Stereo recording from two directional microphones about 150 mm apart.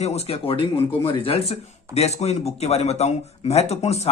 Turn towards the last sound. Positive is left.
turn(degrees=45)  # may be behind; listen again after turning